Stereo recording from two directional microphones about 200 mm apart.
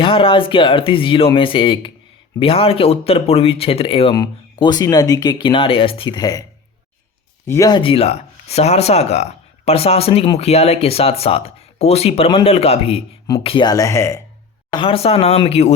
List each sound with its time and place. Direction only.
0.0 s speech: 25° left (ahead or behind)
7.4 s speech: 15° left (ahead or behind)
14.7 s speech: 25° left (ahead or behind)